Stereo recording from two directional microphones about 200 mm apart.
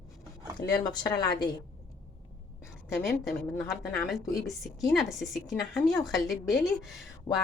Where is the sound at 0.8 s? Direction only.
20° left (ahead or behind).